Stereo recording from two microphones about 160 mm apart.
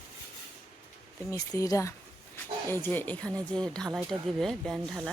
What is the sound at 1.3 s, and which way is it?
Speech, 20° left (ahead or behind).